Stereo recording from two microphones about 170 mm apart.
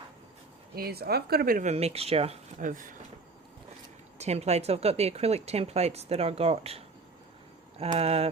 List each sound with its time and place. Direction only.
0.8 s speech: 65° right (ahead or behind)
1.7 s speech: 35° right (ahead or behind)
2.6 s speech: 50° right (ahead or behind)
4.2 s speech: 40° right (ahead or behind)